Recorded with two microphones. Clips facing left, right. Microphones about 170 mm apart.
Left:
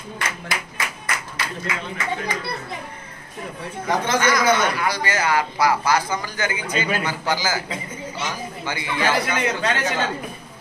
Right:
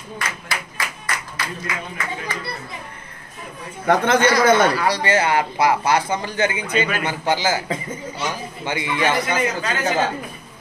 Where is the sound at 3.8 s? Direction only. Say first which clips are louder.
Right 5 dB; 60° right (ahead or behind).